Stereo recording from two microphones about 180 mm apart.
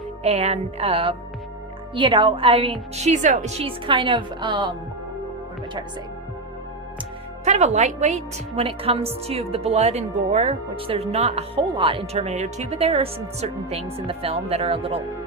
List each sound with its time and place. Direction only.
0.2 s a woman's voice: 35° right (ahead or behind)
7.4 s a woman's voice: 40° right (ahead or behind)